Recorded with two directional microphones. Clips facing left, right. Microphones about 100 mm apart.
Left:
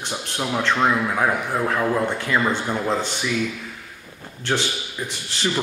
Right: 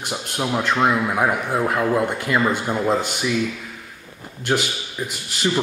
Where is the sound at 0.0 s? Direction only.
10° right (ahead or behind).